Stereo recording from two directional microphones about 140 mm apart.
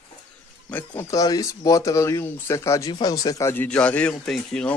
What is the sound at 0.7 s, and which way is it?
Speech, 15° left (ahead or behind).